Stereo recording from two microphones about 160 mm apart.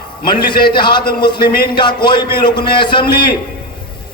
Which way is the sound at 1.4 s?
75° left (ahead or behind).